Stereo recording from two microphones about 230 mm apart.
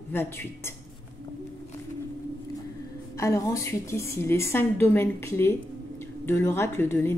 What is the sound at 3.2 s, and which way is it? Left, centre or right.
A woman's voice, centre.